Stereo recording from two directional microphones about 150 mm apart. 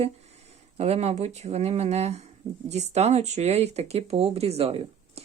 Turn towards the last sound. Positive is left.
turn(degrees=-40)  # may be behind; listen again after turning